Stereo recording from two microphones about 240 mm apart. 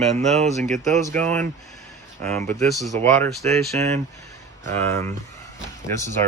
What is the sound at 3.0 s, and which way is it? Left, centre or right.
Speech, centre.